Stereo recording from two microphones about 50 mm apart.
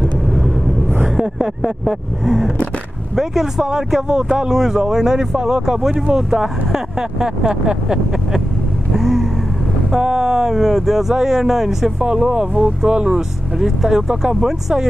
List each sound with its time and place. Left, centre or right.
0.8 s vehicle: right
1.1 s speech: centre
8.9 s vehicle: centre
9.8 s speech: centre
12.1 s speech: centre